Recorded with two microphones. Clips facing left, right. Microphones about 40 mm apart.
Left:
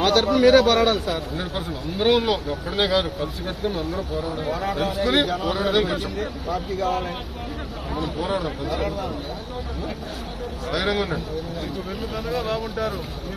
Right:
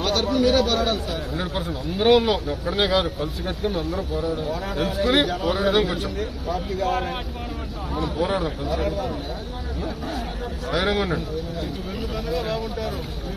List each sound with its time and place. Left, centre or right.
0.0 s a man's voice: left
1.3 s a man's voice: right
3.8 s speech: left
5.0 s a man's voice: right
5.8 s speech: left
8.0 s a man's voice: right
8.5 s speech: left
10.7 s a man's voice: right
12.3 s a man's voice: left